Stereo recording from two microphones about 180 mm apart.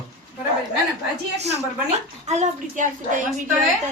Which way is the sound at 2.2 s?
40° right (ahead or behind).